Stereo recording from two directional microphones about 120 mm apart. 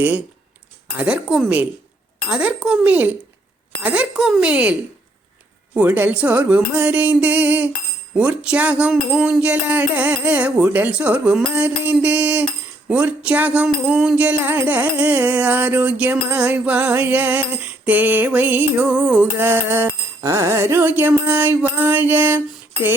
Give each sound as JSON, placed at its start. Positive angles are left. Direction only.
{"t": 0.9, "sound": "music", "side_deg": -10}